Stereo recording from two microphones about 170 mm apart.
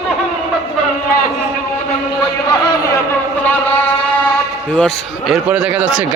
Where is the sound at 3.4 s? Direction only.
10° left (ahead or behind).